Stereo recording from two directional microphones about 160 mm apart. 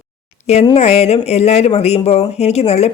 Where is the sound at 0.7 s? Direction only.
40° left (ahead or behind).